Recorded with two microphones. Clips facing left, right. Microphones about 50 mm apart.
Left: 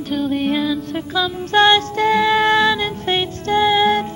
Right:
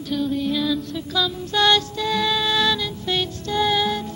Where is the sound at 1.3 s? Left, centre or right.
Left.